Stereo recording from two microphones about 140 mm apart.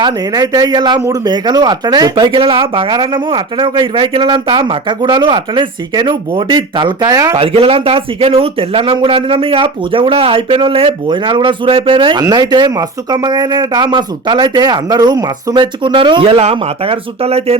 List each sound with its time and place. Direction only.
0.0 s speech: 25° right (ahead or behind)
7.3 s speech: 45° right (ahead or behind)